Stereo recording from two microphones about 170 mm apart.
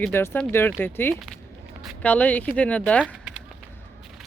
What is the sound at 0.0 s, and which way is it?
Speech, 10° left (ahead or behind).